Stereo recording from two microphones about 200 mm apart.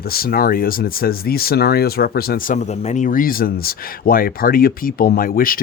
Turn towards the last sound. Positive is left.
turn(degrees=45)  # may be behind; listen again after turning